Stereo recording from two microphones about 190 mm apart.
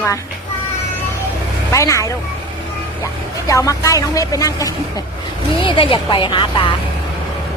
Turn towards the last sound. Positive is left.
turn(degrees=25)  # may be behind; listen again after turning